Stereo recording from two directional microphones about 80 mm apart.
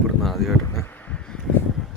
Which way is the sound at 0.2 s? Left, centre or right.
Centre.